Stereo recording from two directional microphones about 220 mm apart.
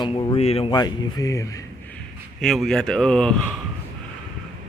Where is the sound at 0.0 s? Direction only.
20° left (ahead or behind).